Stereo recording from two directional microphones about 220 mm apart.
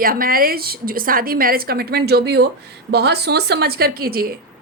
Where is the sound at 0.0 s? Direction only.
40° right (ahead or behind).